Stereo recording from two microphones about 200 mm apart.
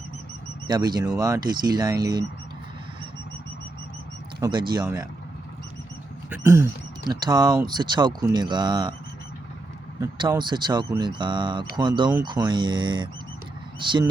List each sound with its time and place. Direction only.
0.7 s speech: 20° right (ahead or behind)
4.4 s speech: 20° right (ahead or behind)
6.4 s speech: 15° right (ahead or behind)
10.0 s speech: 20° right (ahead or behind)